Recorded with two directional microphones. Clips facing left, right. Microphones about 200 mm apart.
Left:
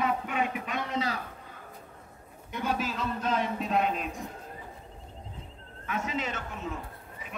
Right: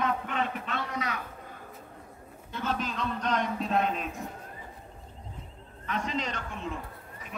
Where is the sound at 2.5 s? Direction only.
10° left (ahead or behind).